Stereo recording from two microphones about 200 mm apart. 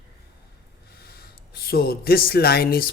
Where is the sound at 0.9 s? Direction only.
50° left (ahead or behind).